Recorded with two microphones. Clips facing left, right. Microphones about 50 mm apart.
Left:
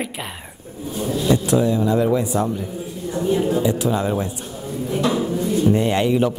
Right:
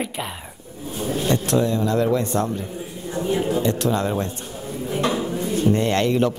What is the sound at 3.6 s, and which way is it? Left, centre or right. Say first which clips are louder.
Speech: left 1 dB; centre.